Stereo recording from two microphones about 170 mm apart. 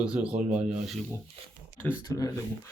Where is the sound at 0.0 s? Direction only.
5° right (ahead or behind).